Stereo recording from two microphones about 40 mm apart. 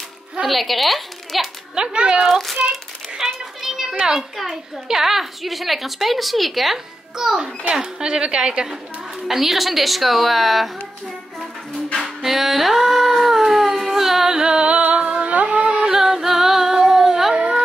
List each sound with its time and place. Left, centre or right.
0.5 s a woman's voice: centre
1.8 s a woman's voice: right
3.2 s children playing: centre
4.0 s a child's voice: centre
9.3 s a woman's voice: centre
12.2 s music: centre
13.9 s a sound: centre; by 14.8 s right
14.8 s humming: right
15.8 s music: centre